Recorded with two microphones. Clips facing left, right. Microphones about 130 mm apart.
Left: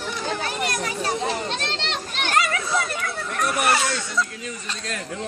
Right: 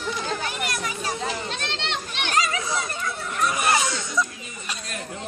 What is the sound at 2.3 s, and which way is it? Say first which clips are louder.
Children playing: left 2 dB; 60° left (ahead or behind).